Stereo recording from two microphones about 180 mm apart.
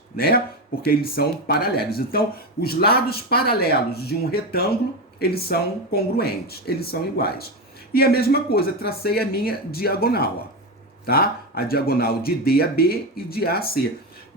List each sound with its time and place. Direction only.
0.2 s speech: 55° left (ahead or behind)